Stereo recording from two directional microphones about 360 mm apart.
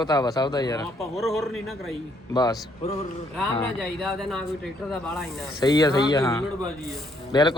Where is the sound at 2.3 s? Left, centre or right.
Centre.